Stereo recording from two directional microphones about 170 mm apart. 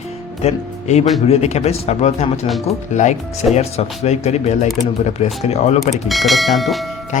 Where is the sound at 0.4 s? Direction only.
40° left (ahead or behind).